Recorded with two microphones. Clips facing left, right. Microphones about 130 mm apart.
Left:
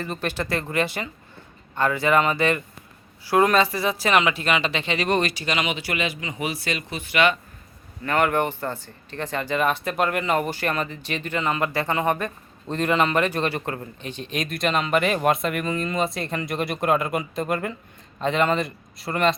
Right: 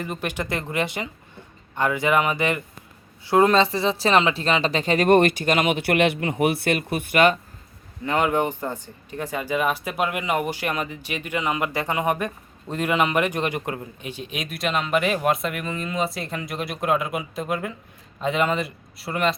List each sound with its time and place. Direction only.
0.0 s speech: 15° right (ahead or behind); by 7.3 s 45° right (ahead or behind)
8.0 s speech: 15° right (ahead or behind)